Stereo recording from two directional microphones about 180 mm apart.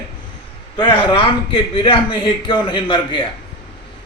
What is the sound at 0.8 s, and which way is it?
Speech, 25° left (ahead or behind).